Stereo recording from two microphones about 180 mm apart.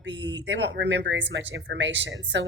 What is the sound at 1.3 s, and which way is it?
Speech, 85° right.